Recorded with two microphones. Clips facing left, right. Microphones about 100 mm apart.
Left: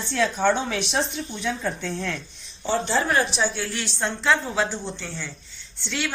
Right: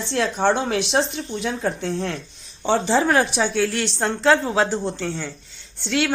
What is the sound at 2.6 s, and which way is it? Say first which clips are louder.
Speech: right 5 dB; 90° right.